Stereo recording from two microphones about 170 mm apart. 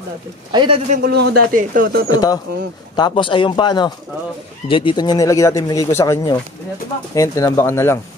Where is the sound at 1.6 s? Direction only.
55° right (ahead or behind).